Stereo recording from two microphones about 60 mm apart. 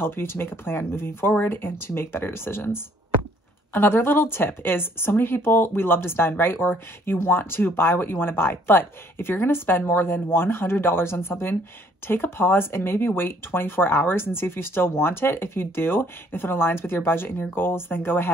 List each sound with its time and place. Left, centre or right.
0.0 s a woman's voice: left